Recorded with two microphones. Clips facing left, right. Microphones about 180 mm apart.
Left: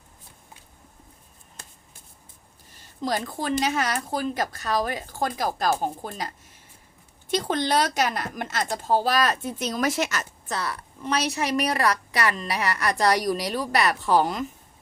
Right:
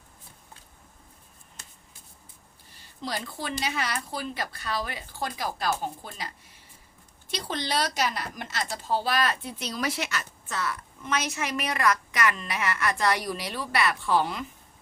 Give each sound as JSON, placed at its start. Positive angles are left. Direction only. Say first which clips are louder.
{"t": 3.0, "sound": "a woman's voice", "louder": "left 6 dB", "side_deg": 45}